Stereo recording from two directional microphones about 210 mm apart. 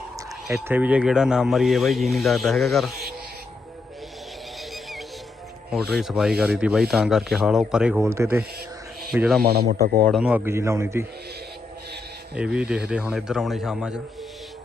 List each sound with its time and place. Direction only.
0.4 s rub: 5° right (ahead or behind)
5.7 s rub: centre (ahead or behind)
9.0 s speech: centre (ahead or behind)
9.4 s speech: 50° right (ahead or behind)
10.1 s a man's voice: 5° right (ahead or behind)
12.3 s rub: 5° right (ahead or behind)